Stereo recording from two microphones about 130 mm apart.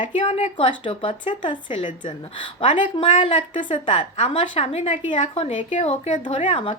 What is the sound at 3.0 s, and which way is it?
A woman's voice, 45° left (ahead or behind).